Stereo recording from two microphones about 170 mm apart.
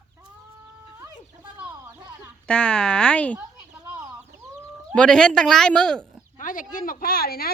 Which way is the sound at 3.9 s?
20° right (ahead or behind).